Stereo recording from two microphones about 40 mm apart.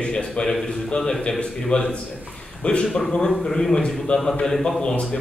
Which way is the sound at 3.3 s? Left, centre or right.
Centre.